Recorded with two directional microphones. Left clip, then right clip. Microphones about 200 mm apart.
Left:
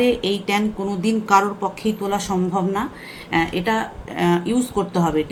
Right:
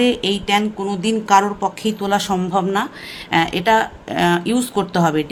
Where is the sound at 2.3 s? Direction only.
55° right (ahead or behind).